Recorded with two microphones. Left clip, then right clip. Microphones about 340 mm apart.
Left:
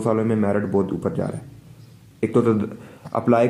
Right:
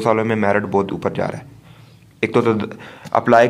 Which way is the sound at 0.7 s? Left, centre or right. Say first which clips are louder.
Right 3 dB; right.